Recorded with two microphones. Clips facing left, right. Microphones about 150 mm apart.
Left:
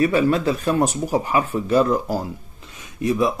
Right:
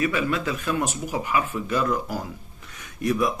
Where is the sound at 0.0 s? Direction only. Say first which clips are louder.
Left 7 dB; 35° left (ahead or behind).